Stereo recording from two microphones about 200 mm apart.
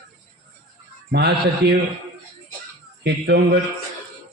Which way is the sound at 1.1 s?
55° right (ahead or behind).